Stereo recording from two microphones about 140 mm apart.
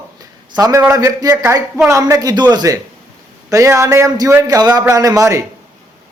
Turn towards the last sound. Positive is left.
turn(degrees=-20)  # may be behind; listen again after turning